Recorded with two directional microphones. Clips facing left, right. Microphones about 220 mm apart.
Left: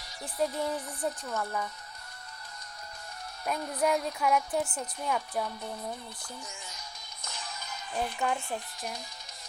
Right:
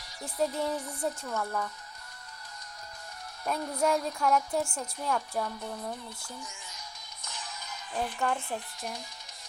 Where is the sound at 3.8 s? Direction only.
5° left (ahead or behind).